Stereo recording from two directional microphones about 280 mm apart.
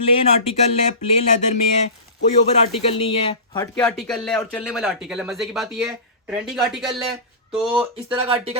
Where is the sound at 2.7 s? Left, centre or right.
Centre.